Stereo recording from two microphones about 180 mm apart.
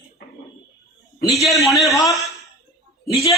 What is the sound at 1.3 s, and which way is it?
A woman's voice, centre (ahead or behind).